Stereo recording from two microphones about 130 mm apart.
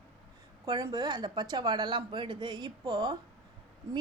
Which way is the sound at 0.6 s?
30° right (ahead or behind).